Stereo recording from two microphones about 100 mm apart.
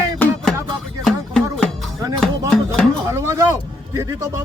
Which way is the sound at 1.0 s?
5° left (ahead or behind).